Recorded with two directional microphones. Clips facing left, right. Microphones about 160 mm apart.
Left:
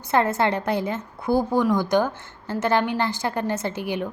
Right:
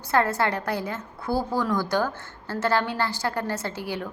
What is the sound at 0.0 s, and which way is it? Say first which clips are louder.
A woman's voice: left 2 dB; 20° left (ahead or behind).